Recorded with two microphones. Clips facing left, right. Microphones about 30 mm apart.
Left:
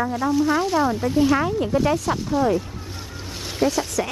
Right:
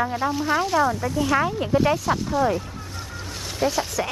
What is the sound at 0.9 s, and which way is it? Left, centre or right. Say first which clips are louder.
Speech: left 3 dB; left.